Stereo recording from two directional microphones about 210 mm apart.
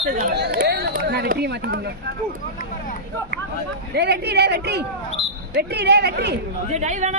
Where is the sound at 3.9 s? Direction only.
50° right (ahead or behind).